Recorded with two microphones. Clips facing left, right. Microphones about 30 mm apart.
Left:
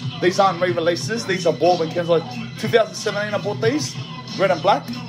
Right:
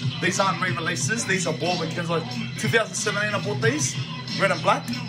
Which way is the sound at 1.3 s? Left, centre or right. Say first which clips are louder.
Left 11 dB; right.